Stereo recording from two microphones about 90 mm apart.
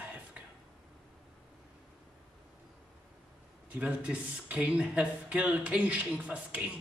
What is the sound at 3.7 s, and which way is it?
Speech, 15° right (ahead or behind).